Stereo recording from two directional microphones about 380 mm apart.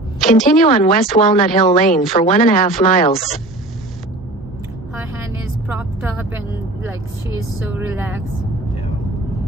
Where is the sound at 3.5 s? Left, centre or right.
Centre.